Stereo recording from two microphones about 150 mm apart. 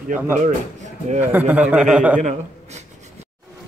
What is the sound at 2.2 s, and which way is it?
Speech, 50° right (ahead or behind).